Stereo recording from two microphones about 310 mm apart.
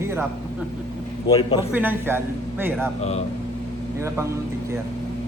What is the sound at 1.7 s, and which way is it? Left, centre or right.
A man's voice, centre.